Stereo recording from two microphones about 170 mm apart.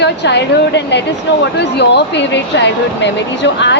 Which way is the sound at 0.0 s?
85° left.